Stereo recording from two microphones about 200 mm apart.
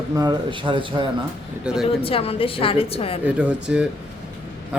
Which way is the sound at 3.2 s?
5° right (ahead or behind).